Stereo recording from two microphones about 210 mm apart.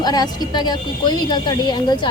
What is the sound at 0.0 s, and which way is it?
Speech, 20° left (ahead or behind).